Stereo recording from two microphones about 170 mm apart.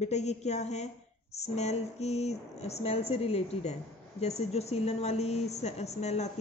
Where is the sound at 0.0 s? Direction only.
40° left (ahead or behind).